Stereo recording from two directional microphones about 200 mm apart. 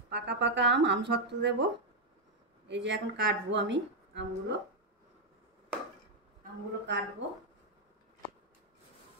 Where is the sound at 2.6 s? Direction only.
60° right (ahead or behind).